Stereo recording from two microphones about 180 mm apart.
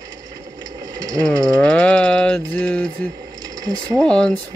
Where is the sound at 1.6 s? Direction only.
5° left (ahead or behind).